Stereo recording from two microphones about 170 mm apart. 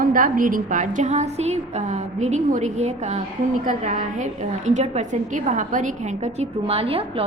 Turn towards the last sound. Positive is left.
turn(degrees=-35)  # may be behind; listen again after turning